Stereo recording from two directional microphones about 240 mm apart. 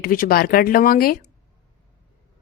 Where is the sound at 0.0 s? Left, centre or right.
Left.